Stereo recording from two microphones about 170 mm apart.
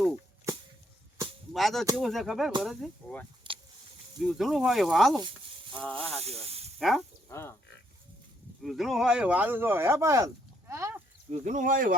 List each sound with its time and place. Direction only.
1.5 s speech: centre (ahead or behind)
3.5 s a sound: 30° right (ahead or behind)
4.2 s speech: centre (ahead or behind)
6.2 s speech: 35° right (ahead or behind)
6.7 s speech: centre (ahead or behind)
7.3 s speech: 15° left (ahead or behind)
8.6 s speech: centre (ahead or behind); by 11.0 s 15° right (ahead or behind)
11.3 s speech: 45° right (ahead or behind)